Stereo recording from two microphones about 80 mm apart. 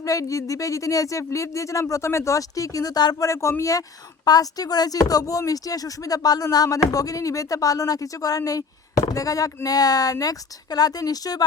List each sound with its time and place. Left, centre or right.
0.0 s speech: left